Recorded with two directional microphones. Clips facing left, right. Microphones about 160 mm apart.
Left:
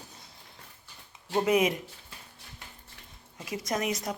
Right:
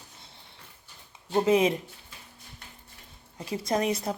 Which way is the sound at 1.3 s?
25° right (ahead or behind).